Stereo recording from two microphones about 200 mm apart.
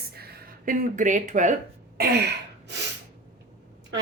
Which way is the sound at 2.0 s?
55° right (ahead or behind).